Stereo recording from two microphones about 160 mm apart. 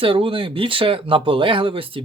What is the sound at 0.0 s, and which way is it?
Speech, 35° right (ahead or behind).